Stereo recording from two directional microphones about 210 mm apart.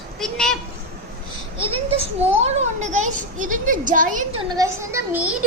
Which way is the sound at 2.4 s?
35° right (ahead or behind).